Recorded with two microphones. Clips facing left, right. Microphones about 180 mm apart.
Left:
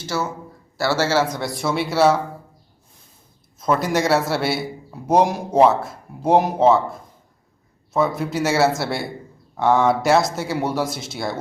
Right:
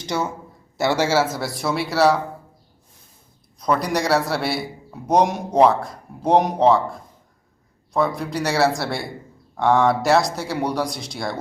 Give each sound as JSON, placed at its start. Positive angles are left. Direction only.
{"t": 0.0, "sound": "a man's voice", "side_deg": -20}
{"t": 3.6, "sound": "a man's voice", "side_deg": 0}